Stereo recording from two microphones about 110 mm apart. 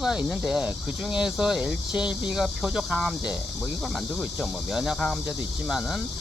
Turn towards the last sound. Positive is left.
turn(degrees=0)  # may be behind; listen again after turning